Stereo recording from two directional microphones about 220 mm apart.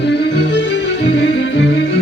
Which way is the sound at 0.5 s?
50° left (ahead or behind).